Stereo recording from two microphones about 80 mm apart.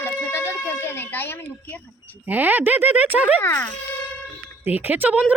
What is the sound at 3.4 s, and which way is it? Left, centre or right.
Speech, left.